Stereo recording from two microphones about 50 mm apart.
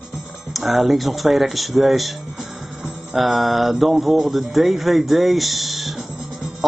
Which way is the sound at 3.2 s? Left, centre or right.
Centre.